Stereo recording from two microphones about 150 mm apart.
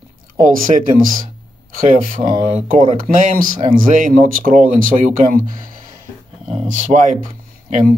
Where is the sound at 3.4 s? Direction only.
65° right (ahead or behind).